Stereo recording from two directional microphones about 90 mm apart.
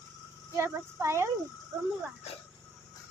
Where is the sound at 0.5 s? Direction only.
30° right (ahead or behind).